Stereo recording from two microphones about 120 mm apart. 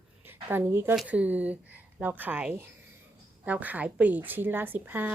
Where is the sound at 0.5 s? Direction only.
20° right (ahead or behind).